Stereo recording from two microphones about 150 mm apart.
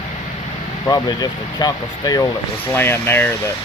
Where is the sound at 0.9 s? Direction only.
25° left (ahead or behind).